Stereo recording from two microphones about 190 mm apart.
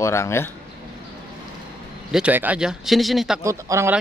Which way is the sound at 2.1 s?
5° right (ahead or behind).